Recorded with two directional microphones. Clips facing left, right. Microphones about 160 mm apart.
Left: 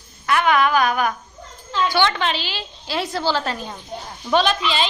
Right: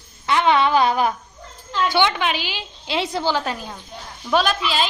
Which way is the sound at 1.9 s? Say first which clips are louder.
Right 1 dB; 15° right (ahead or behind).